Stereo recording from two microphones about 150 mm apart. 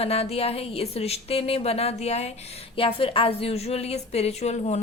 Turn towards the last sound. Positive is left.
turn(degrees=45)  # may be behind; listen again after turning